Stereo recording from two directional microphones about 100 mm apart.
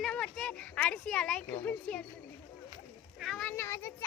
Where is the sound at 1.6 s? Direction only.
10° left (ahead or behind).